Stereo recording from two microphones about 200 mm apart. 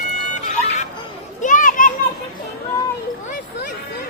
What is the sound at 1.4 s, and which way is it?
Children playing, 40° left (ahead or behind).